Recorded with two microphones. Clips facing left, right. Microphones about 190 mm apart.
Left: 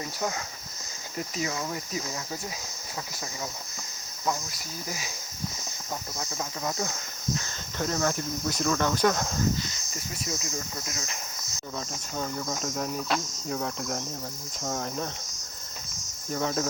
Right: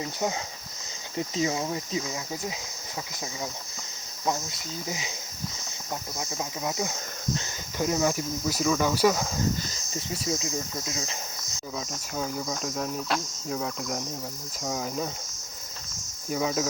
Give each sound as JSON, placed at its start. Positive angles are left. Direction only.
{"t": 1.1, "sound": "speech", "side_deg": -25}
{"t": 4.3, "sound": "speech", "side_deg": -20}
{"t": 6.1, "sound": "speech", "side_deg": -15}
{"t": 9.6, "sound": "speech", "side_deg": -30}
{"t": 12.1, "sound": "cricket", "side_deg": -5}
{"t": 16.3, "sound": "cricket", "side_deg": -5}